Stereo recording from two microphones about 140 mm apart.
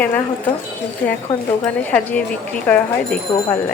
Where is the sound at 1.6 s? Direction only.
10° left (ahead or behind).